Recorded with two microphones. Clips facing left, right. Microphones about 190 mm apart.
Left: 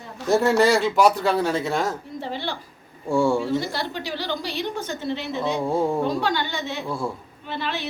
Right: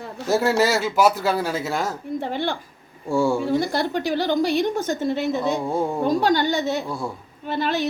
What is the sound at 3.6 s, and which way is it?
A woman's voice, 50° right (ahead or behind).